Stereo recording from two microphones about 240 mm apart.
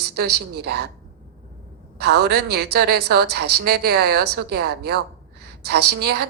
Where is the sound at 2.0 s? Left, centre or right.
Right.